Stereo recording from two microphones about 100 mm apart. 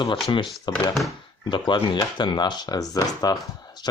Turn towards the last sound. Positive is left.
turn(degrees=40)  # may be behind; listen again after turning